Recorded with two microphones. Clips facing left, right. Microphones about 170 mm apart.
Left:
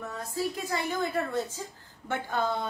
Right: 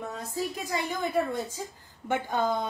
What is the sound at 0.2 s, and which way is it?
A woman's voice, 15° right (ahead or behind).